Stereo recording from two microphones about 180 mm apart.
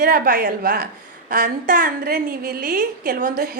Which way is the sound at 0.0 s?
55° right (ahead or behind).